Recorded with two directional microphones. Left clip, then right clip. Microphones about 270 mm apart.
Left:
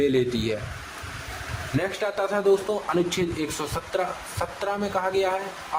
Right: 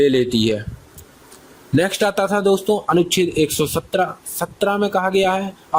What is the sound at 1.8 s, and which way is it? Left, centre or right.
Speech, right.